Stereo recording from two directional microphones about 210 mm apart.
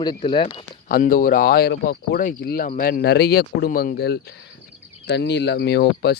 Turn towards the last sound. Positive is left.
turn(degrees=50)  # may be behind; listen again after turning